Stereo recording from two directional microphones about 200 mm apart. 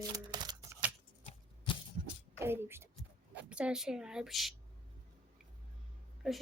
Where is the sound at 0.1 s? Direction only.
20° right (ahead or behind).